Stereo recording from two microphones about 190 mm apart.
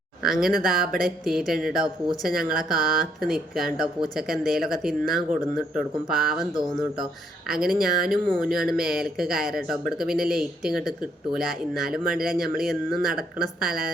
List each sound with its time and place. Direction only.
0.2 s speech: centre (ahead or behind)
11.9 s speech: 50° right (ahead or behind)
12.2 s speech: centre (ahead or behind)